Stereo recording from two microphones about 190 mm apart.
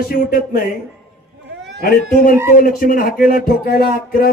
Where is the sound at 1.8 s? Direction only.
50° left (ahead or behind).